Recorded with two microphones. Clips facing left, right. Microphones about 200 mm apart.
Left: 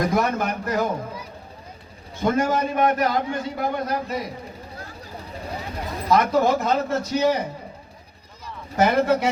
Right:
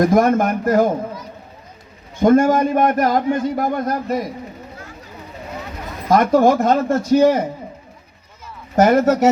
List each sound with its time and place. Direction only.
0.0 s a man's voice: 50° right (ahead or behind)
2.2 s a man's voice: 50° right (ahead or behind)
4.8 s a sound: 35° left (ahead or behind)
6.1 s a man's voice: 50° right (ahead or behind)
8.7 s a man's voice: 45° right (ahead or behind)